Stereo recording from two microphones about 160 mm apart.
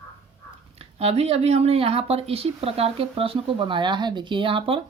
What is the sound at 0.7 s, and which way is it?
Speech, 40° right (ahead or behind).